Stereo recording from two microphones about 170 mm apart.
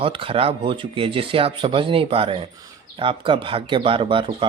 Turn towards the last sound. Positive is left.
turn(degrees=-30)  # may be behind; listen again after turning